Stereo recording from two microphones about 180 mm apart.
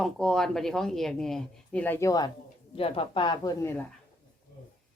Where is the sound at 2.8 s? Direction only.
30° left (ahead or behind).